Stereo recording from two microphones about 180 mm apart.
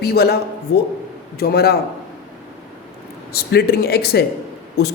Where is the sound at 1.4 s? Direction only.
60° left (ahead or behind).